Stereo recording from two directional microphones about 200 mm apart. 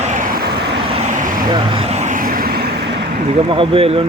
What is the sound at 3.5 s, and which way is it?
Speech, 25° right (ahead or behind).